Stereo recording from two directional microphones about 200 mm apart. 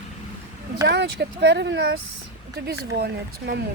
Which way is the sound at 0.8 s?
55° right (ahead or behind).